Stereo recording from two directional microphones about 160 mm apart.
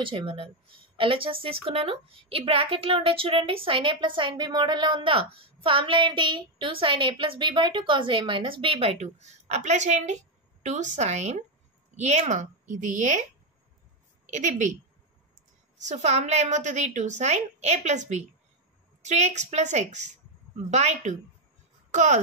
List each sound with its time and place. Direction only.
0.0 s a woman's voice: 30° right (ahead or behind); by 14.8 s 50° right (ahead or behind)
15.8 s a woman's voice: 45° right (ahead or behind)